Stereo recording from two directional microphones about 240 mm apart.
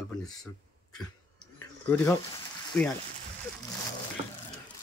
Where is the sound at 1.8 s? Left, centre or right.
Centre.